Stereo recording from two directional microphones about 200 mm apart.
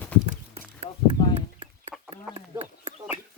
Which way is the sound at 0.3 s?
30° right (ahead or behind).